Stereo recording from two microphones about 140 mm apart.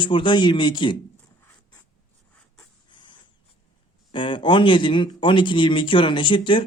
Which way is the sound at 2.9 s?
35° left (ahead or behind).